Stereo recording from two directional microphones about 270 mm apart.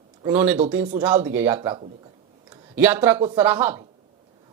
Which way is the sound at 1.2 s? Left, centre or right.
Centre.